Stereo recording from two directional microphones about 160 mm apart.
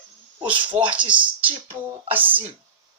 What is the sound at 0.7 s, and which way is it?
Speech, 30° right (ahead or behind).